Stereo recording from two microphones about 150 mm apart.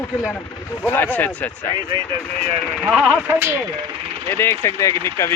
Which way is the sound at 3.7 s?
30° right (ahead or behind).